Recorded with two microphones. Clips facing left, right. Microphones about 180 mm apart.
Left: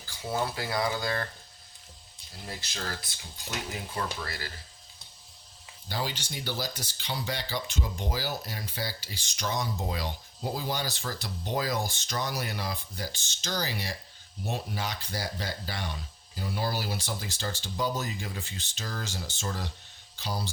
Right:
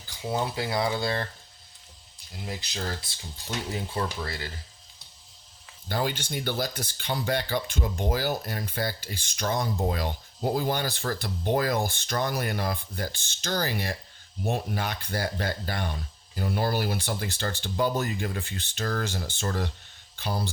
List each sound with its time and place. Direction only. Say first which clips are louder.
0.2 s speech: right 2 dB; 20° right (ahead or behind)
2.5 s speech: right 4 dB; 20° right (ahead or behind)
5.9 s speech: right 5 dB; 55° right (ahead or behind)